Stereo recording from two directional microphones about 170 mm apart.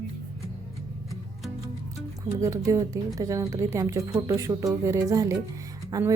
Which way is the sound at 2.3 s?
20° right (ahead or behind).